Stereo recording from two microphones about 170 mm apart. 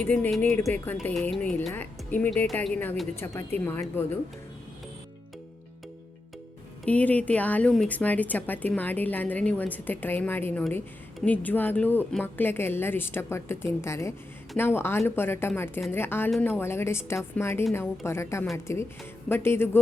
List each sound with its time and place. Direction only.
0.0 s a woman's voice: 10° left (ahead or behind)
6.8 s a woman's voice: 10° left (ahead or behind)